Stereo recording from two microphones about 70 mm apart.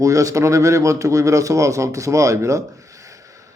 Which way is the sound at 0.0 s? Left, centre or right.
Right.